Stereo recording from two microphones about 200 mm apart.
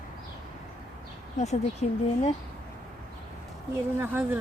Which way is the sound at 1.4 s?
35° left (ahead or behind).